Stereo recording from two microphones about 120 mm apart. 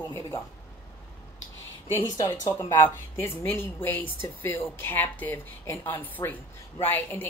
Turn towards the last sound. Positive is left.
turn(degrees=15)  # may be behind; listen again after turning